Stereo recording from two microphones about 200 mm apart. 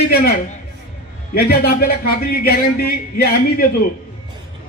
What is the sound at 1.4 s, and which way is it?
A man's voice, 50° left (ahead or behind).